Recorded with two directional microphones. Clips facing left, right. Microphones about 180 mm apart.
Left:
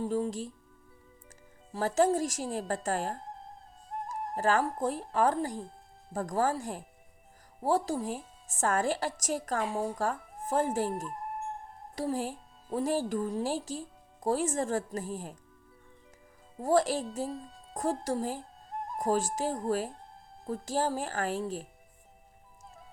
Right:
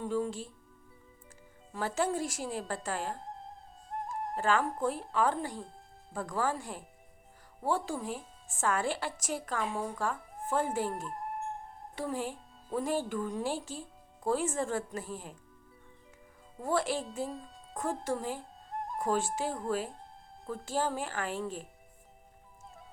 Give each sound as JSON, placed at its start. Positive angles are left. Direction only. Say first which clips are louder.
{"t": 0.0, "sound": "a woman's voice", "louder": "left 2 dB", "side_deg": 40}
{"t": 1.7, "sound": "a woman's voice", "louder": "left 6 dB", "side_deg": 40}
{"t": 3.8, "sound": "music", "louder": "even", "side_deg": 0}
{"t": 4.4, "sound": "a woman's voice", "louder": "left 2 dB", "side_deg": 40}
{"t": 16.6, "sound": "a woman's voice", "louder": "left 5 dB", "side_deg": 40}
{"t": 17.2, "sound": "a child's voice", "louder": "left 3 dB", "side_deg": 0}
{"t": 18.0, "sound": "a woman's voice", "louder": "left 2 dB", "side_deg": 40}
{"t": 18.7, "sound": "music", "louder": "even", "side_deg": 0}
{"t": 18.9, "sound": "a woman's voice", "louder": "left 2 dB", "side_deg": 40}